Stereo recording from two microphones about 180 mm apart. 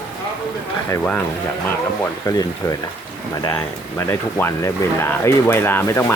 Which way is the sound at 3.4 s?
15° left (ahead or behind).